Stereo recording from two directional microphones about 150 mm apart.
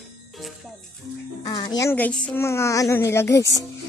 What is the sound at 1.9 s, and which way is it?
A child's voice, 10° left (ahead or behind).